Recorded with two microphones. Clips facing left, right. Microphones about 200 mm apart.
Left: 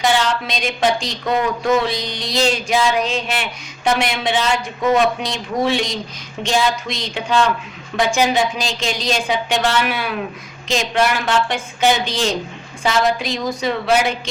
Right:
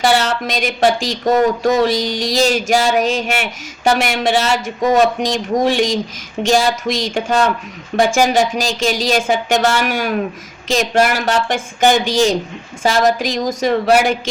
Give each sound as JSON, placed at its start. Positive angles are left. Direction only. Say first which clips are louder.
{"t": 0.3, "sound": "speech", "louder": "right 2 dB", "side_deg": -45}